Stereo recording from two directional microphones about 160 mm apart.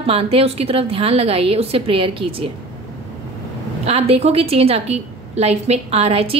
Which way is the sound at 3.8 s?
40° right (ahead or behind).